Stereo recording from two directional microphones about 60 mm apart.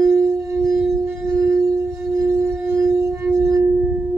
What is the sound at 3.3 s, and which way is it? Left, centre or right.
Singing bowl, right.